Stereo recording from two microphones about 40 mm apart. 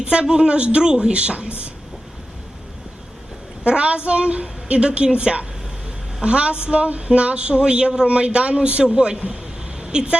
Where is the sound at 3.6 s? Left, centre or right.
Right.